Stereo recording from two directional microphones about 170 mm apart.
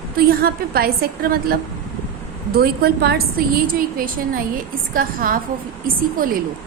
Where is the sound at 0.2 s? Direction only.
60° right (ahead or behind).